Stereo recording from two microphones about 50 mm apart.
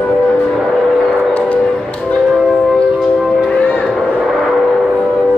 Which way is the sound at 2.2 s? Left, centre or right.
Centre.